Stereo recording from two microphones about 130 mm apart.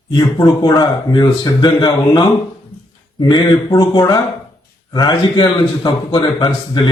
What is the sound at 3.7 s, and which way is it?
Speech, 30° left (ahead or behind).